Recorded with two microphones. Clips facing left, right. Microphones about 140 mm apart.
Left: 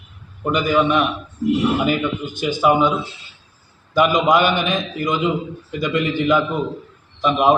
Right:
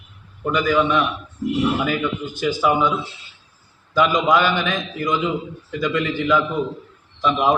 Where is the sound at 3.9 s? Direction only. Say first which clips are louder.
Left 2 dB; 15° left (ahead or behind).